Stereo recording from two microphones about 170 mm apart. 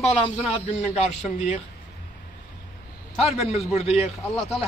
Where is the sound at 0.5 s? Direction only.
40° left (ahead or behind).